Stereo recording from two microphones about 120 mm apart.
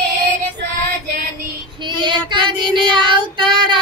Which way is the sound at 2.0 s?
40° right (ahead or behind).